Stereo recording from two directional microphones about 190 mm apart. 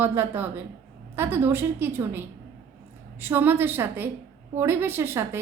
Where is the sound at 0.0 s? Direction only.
10° right (ahead or behind).